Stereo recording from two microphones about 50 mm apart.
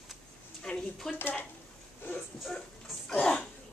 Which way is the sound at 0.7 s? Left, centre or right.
Centre.